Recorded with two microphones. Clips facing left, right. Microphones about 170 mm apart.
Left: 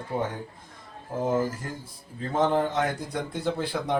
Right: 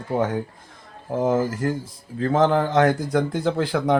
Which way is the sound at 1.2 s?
90° right.